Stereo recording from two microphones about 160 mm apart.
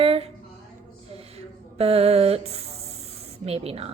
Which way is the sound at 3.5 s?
40° right (ahead or behind).